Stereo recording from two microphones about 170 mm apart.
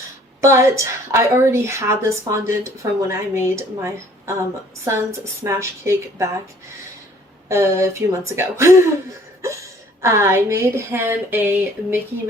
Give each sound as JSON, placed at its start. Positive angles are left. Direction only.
{"t": 0.4, "sound": "a woman's voice", "side_deg": -15}
{"t": 7.4, "sound": "a woman's voice", "side_deg": -15}
{"t": 10.0, "sound": "a woman's voice", "side_deg": -15}